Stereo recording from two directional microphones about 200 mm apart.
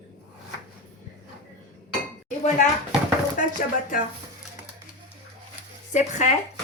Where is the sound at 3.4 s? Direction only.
40° left (ahead or behind).